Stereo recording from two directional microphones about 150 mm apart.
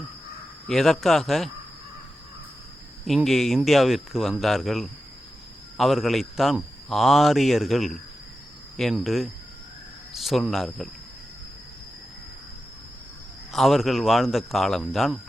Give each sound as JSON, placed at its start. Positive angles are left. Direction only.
{"t": 0.7, "sound": "speech", "side_deg": 0}
{"t": 3.2, "sound": "speech", "side_deg": 0}
{"t": 13.5, "sound": "speech", "side_deg": 0}